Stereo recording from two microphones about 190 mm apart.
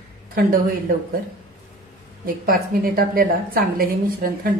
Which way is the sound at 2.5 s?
50° right (ahead or behind).